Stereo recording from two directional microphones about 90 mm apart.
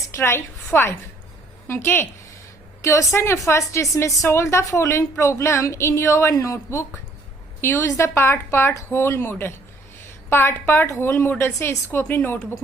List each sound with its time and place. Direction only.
0.1 s a woman's voice: 30° left (ahead or behind)